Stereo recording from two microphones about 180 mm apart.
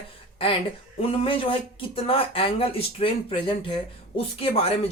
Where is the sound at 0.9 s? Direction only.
30° left (ahead or behind).